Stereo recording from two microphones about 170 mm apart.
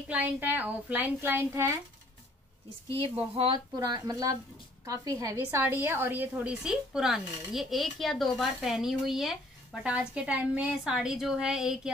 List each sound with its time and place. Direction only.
0.1 s a woman's voice: 10° right (ahead or behind)
3.0 s a woman's voice: 30° right (ahead or behind); by 11.9 s 5° right (ahead or behind)